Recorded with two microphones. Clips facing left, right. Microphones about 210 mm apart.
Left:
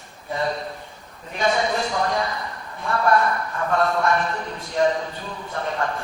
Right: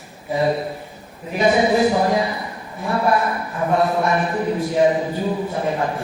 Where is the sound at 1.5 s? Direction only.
10° right (ahead or behind).